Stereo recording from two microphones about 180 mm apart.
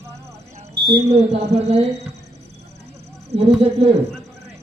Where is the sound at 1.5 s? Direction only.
35° right (ahead or behind).